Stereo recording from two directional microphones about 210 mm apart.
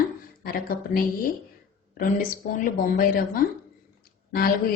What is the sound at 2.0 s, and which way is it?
A woman's voice, 40° left (ahead or behind).